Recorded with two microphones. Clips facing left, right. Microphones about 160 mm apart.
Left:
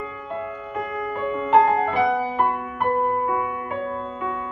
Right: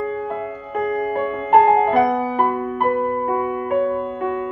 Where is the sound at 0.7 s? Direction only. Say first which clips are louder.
Right 8 dB; 45° right (ahead or behind).